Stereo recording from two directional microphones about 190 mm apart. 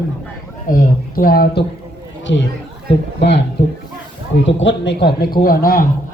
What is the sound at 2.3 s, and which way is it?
Speech, 70° left (ahead or behind).